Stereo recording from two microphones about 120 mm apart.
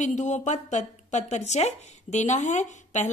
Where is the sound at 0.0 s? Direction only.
85° left.